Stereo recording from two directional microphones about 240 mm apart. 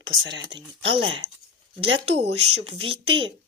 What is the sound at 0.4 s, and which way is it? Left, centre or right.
A woman's voice, right.